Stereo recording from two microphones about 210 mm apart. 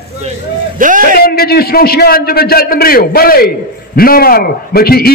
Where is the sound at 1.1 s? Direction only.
45° left (ahead or behind).